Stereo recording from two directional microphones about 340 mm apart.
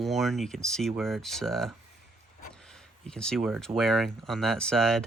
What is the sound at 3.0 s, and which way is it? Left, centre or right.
Speech, centre.